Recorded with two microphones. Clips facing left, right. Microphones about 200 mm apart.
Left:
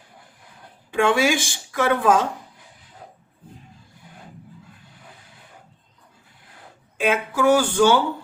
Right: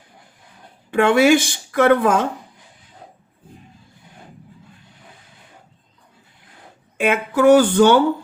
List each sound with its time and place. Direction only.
0.9 s a woman's voice: 60° right (ahead or behind)
6.9 s a woman's voice: 55° right (ahead or behind)